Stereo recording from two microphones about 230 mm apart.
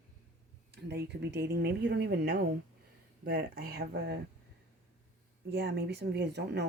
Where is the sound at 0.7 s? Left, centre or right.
Right.